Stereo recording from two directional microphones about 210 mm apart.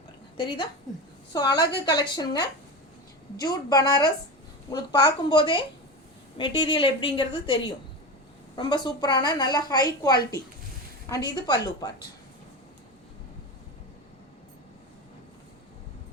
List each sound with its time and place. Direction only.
0.3 s a woman's voice: 20° left (ahead or behind)
1.5 s a woman's voice: 50° left (ahead or behind)
1.8 s a woman's voice: 20° left (ahead or behind)